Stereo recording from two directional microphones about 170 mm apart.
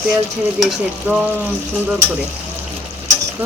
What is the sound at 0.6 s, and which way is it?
Frying, 5° right (ahead or behind).